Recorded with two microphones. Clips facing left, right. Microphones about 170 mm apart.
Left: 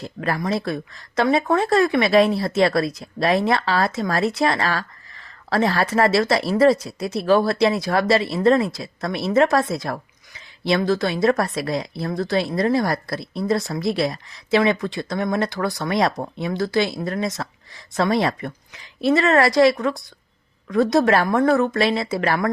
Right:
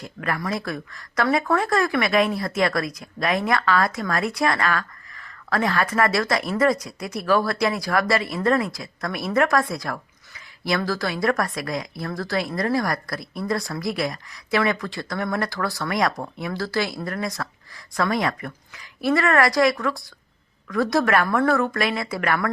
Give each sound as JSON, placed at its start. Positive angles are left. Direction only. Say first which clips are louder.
{"t": 0.0, "sound": "speech", "louder": "left 3 dB", "side_deg": 30}